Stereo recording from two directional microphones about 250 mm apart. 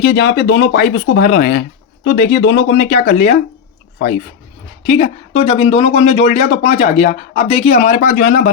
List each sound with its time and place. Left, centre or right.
0.0 s speech: left
4.9 s speech: left